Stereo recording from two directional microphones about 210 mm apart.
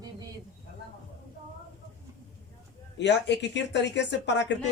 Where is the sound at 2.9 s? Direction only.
55° left (ahead or behind).